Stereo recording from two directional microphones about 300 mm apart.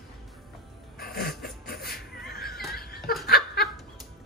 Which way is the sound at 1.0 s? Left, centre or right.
Left.